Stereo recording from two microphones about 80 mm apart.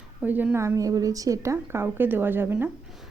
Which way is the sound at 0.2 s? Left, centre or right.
Right.